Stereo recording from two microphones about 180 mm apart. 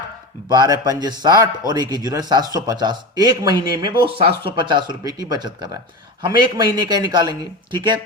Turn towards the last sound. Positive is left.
turn(degrees=-25)  # may be behind; listen again after turning